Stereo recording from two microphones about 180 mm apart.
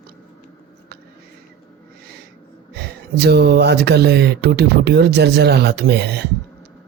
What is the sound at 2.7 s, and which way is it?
Speech, 65° right (ahead or behind).